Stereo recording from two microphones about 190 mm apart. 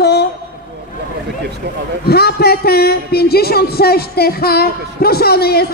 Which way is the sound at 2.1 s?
55° left (ahead or behind).